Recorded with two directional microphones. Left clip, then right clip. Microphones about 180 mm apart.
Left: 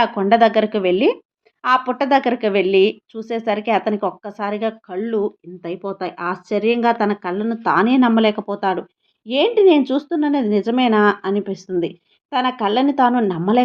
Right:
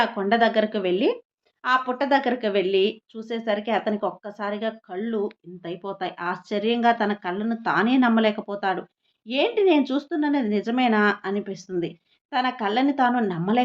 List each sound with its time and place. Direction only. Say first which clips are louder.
0.0 s a woman's voice: left 6 dB; 35° left (ahead or behind)